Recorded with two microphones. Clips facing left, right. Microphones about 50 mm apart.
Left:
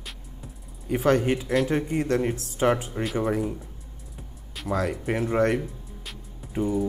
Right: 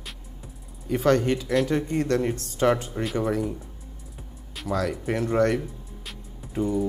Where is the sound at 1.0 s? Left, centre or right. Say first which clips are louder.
Right 1 dB; centre.